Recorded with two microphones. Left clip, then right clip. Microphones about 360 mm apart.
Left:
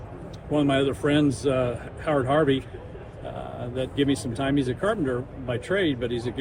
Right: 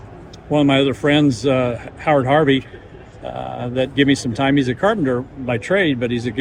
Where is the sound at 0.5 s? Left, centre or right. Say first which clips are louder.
Right 7 dB; right.